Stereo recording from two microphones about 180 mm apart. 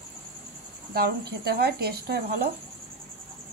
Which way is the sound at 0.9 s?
60° right (ahead or behind).